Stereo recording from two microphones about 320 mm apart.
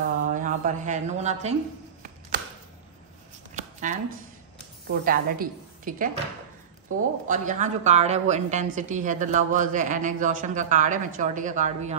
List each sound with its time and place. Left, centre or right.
0.3 s a woman's voice: right
3.5 s a sound: right
4.8 s a woman's voice: right